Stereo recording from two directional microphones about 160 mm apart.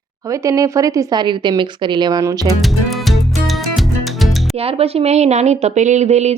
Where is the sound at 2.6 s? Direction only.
Centre (ahead or behind).